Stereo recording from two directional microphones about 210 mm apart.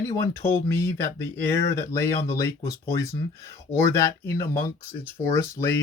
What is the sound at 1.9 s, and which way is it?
Speech, 15° left (ahead or behind).